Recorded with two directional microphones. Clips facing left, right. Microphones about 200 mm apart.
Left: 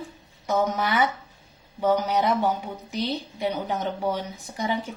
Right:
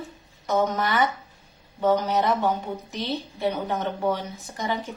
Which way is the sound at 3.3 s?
15° left (ahead or behind).